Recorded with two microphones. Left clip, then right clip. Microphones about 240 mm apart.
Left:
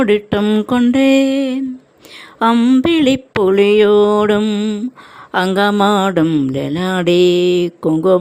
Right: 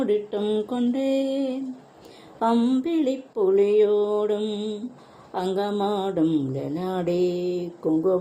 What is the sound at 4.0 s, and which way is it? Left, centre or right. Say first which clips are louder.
Mantra: left 11 dB; left.